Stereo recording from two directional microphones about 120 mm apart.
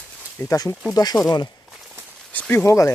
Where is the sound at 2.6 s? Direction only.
25° left (ahead or behind).